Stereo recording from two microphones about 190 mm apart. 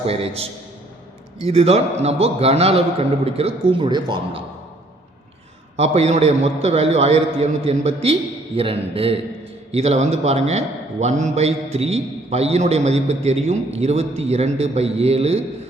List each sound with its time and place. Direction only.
0.0 s a man's voice: 30° right (ahead or behind)
5.7 s a man's voice: 35° right (ahead or behind)